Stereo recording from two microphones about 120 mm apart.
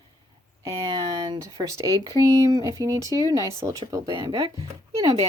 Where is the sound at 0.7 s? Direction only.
40° right (ahead or behind).